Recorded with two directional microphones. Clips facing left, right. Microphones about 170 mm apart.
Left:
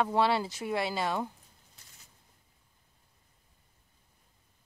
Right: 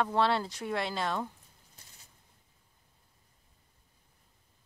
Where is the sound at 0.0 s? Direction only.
5° left (ahead or behind).